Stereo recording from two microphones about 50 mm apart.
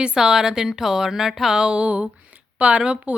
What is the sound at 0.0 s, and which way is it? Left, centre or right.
Speech, centre.